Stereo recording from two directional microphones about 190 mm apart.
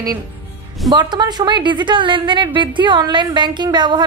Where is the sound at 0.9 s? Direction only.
20° right (ahead or behind).